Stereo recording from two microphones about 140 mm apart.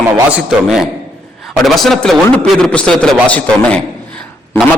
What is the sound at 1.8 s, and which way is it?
A man's voice, centre (ahead or behind).